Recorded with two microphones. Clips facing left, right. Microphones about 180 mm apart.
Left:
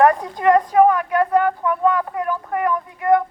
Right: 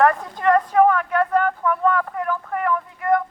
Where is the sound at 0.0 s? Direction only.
15° left (ahead or behind).